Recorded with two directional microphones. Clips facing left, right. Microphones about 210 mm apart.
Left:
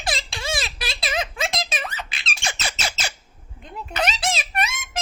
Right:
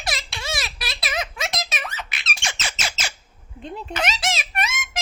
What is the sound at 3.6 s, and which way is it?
Speech, 30° right (ahead or behind).